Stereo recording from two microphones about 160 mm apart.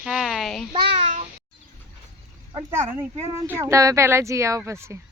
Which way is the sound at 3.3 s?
15° right (ahead or behind).